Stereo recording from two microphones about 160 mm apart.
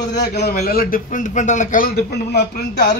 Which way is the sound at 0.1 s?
90° left.